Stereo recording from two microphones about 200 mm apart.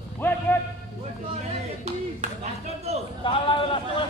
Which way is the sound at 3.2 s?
25° left (ahead or behind).